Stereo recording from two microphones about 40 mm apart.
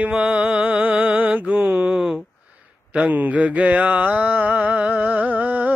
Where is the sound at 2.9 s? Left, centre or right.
Right.